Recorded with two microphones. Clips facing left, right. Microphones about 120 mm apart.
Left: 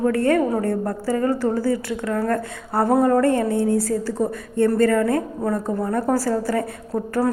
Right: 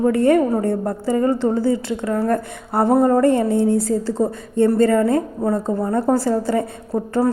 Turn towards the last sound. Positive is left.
turn(degrees=-20)  # may be behind; listen again after turning